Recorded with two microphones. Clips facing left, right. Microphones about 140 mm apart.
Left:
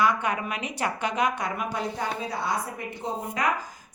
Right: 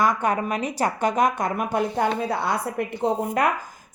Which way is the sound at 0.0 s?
45° right (ahead or behind).